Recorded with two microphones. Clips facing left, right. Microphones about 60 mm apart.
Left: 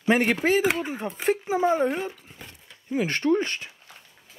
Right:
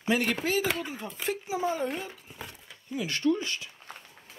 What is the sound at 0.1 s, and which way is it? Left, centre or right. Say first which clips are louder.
Speech: left 6 dB; left.